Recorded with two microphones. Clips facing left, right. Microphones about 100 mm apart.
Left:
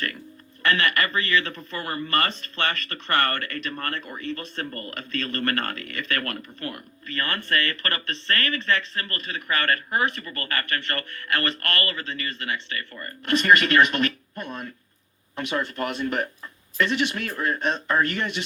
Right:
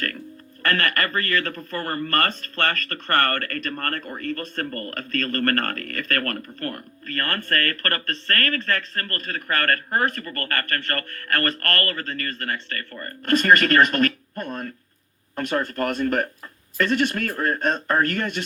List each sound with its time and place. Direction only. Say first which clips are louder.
0.6 s speech: even; 50° right (ahead or behind)